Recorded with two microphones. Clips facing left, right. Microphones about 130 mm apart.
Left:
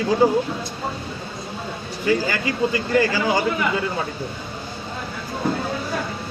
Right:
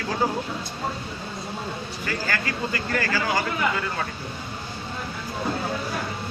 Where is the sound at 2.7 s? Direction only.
20° left (ahead or behind).